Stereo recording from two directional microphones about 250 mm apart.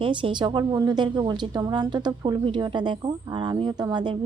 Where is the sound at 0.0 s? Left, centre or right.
Centre.